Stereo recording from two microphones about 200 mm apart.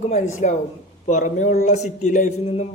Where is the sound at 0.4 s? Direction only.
35° left (ahead or behind).